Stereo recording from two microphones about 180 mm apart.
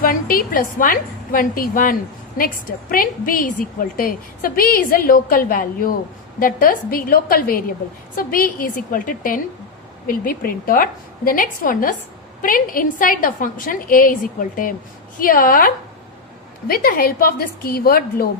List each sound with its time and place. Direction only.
0.0 s a woman's voice: 50° left (ahead or behind)